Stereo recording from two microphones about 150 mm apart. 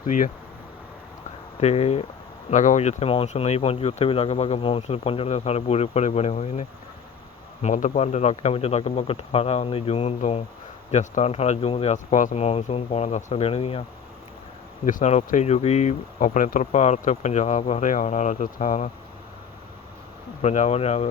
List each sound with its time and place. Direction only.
0.1 s speech: 60° left (ahead or behind)
1.6 s speech: 45° left (ahead or behind)
2.5 s speech: 55° left (ahead or behind)
12.1 s speech: 50° left (ahead or behind)
14.8 s speech: 55° left (ahead or behind)
20.4 s speech: 50° left (ahead or behind)